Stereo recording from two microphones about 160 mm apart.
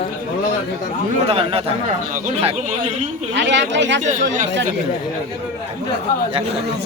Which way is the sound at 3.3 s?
90° right.